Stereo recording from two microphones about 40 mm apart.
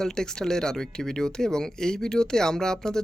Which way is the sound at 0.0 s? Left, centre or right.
Centre.